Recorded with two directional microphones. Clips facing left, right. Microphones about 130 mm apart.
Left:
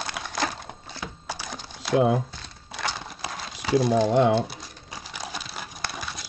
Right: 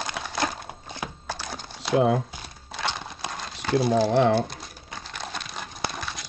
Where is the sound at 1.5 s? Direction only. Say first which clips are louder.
Even; centre (ahead or behind).